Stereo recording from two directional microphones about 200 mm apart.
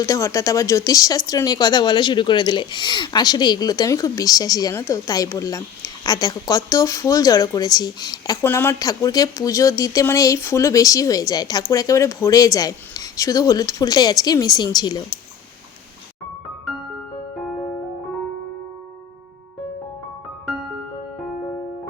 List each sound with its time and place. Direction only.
0.0 s speech: 15° left (ahead or behind)